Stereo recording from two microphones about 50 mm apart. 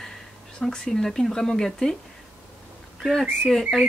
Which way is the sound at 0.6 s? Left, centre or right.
Centre.